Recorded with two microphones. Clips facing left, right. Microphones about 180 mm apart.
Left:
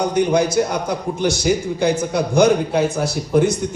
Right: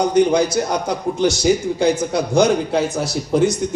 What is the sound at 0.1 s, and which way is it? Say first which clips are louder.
A man's voice: right 2 dB; 55° left (ahead or behind).